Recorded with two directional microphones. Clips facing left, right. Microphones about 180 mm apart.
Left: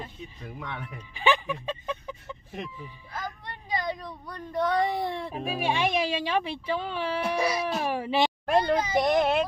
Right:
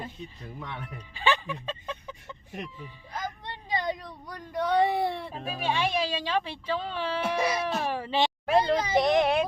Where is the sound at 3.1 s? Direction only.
20° right (ahead or behind).